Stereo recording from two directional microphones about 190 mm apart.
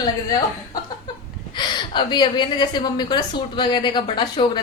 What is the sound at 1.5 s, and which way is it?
A woman's voice, 25° left (ahead or behind).